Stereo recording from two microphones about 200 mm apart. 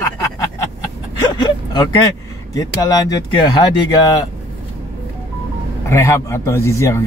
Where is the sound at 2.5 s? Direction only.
15° left (ahead or behind).